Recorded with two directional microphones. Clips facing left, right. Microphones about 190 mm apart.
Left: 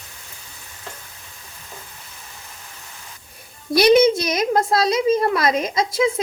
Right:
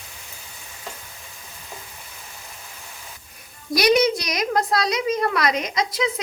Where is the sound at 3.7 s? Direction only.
25° left (ahead or behind).